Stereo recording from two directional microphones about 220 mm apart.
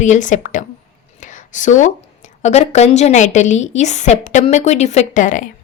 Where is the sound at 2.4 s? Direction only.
30° left (ahead or behind).